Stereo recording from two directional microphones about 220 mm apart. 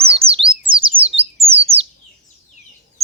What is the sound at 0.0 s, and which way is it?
Bird, 25° right (ahead or behind).